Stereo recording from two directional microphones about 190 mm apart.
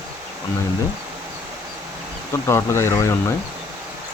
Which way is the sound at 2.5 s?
15° left (ahead or behind).